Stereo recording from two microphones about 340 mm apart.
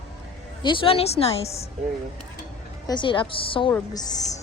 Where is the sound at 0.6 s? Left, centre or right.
Centre.